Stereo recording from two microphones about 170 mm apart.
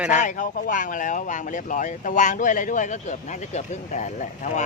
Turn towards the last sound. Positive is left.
turn(degrees=45)  # may be behind; listen again after turning